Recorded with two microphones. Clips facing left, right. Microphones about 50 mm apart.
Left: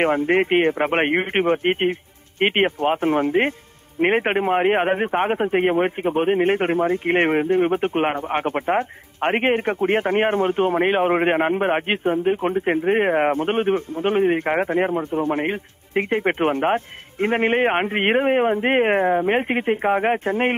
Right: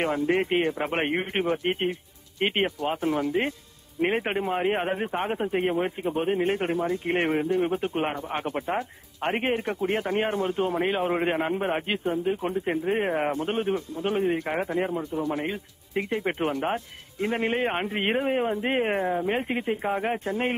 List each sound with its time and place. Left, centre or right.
0.0 s a man's voice: left